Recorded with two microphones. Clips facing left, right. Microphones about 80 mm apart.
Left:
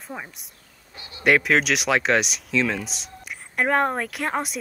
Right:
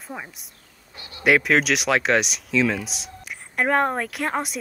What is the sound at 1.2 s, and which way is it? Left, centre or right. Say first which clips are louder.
Speech: right 1 dB; centre.